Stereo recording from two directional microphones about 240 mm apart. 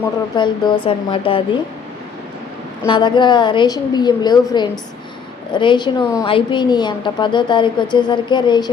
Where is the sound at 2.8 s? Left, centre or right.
Centre.